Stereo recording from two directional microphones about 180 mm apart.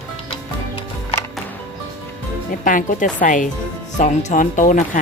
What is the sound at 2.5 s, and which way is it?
Speech, 50° left (ahead or behind).